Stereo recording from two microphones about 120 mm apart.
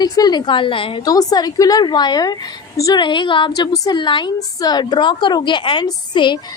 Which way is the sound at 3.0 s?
40° left (ahead or behind).